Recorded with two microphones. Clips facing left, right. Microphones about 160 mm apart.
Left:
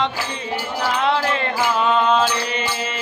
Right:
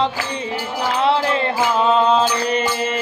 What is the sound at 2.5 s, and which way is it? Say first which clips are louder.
Mantra: right 5 dB; 45° right (ahead or behind).